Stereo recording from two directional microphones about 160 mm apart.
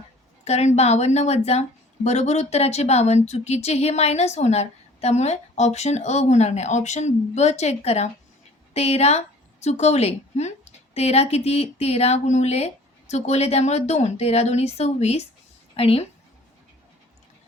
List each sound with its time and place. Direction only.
0.4 s a woman's voice: 40° left (ahead or behind)